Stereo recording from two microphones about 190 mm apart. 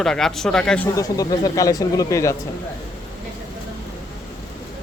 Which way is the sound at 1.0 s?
20° left (ahead or behind).